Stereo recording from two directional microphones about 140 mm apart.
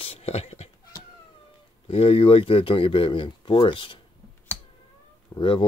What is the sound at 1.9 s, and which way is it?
Speech, 40° left (ahead or behind).